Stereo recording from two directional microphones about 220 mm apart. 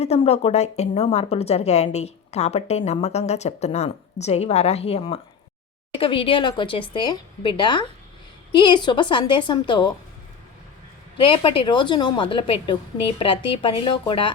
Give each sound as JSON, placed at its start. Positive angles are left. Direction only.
{"t": 0.0, "sound": "a woman's voice", "side_deg": 30}
{"t": 11.2, "sound": "a woman's voice", "side_deg": 25}